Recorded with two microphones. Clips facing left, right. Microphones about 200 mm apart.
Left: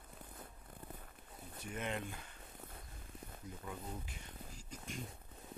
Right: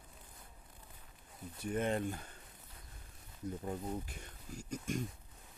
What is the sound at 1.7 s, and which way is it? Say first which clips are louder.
Speech: right 7 dB; 40° right (ahead or behind).